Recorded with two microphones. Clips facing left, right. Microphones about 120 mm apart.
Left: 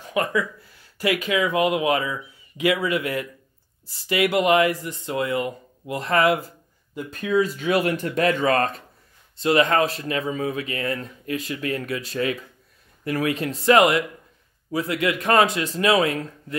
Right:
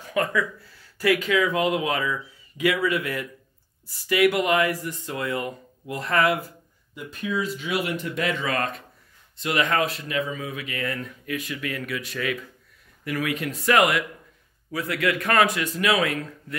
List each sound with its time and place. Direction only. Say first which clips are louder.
0.1 s speech: left 1 dB; 20° left (ahead or behind)
7.1 s speech: left 6 dB; 45° left (ahead or behind); by 16.5 s 30° left (ahead or behind)